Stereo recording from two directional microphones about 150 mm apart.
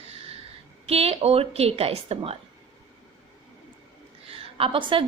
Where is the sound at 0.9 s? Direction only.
40° right (ahead or behind).